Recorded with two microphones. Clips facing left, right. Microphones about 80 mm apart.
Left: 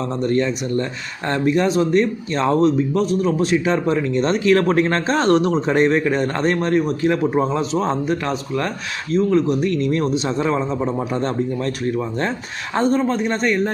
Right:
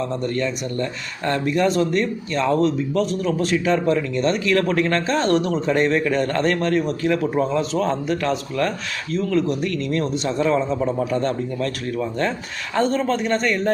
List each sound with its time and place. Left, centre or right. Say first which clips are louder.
0.0 s speech: left 3 dB; left
12.7 s a man's voice: left 2 dB; centre